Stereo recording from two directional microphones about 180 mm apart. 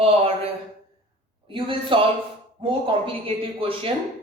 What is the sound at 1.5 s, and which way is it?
A woman's voice, 30° right (ahead or behind).